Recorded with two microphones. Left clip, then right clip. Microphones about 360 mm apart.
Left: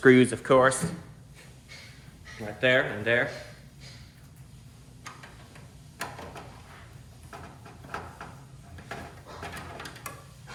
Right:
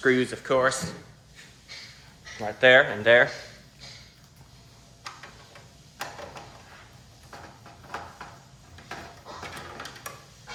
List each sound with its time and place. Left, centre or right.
0.0 s speech: centre
2.6 s speech: centre